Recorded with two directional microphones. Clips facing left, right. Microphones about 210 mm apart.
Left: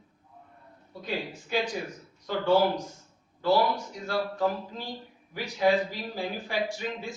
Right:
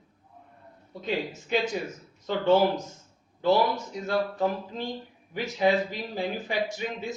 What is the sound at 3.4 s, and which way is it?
A man's voice, 20° right (ahead or behind).